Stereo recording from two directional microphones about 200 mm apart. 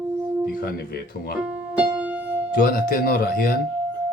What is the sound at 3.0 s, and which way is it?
Music, 50° left (ahead or behind).